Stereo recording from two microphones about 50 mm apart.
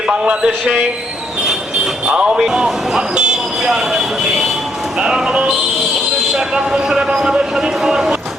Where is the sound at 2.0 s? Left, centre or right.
Centre.